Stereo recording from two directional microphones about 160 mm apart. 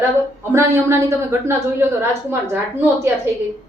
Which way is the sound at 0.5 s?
15° right (ahead or behind).